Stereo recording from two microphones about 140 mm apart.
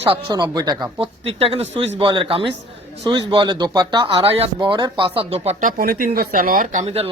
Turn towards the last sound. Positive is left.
turn(degrees=-45)  # may be behind; listen again after turning